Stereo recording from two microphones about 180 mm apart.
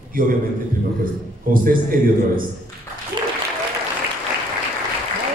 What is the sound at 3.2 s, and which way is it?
Applause, 25° right (ahead or behind).